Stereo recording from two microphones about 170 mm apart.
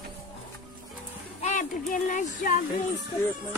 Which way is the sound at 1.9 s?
50° left (ahead or behind).